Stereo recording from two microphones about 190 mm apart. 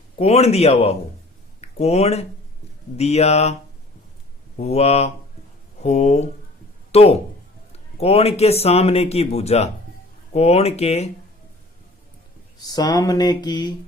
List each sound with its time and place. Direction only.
0.2 s speech: 35° left (ahead or behind)
4.5 s speech: 35° left (ahead or behind)
12.5 s speech: 20° left (ahead or behind)